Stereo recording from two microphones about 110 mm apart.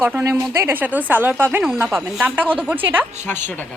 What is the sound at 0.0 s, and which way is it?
Speech, 20° right (ahead or behind).